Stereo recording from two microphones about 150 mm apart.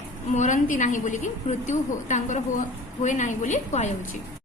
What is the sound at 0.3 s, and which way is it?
A woman's voice, 55° left (ahead or behind).